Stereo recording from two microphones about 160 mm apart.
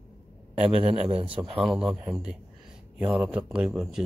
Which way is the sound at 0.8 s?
35° right (ahead or behind).